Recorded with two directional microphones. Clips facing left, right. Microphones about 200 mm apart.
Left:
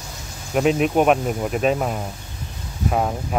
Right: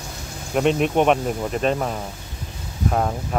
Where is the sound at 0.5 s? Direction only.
5° left (ahead or behind).